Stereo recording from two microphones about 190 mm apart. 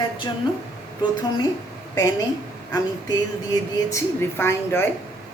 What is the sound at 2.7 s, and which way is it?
A woman's voice, 20° left (ahead or behind).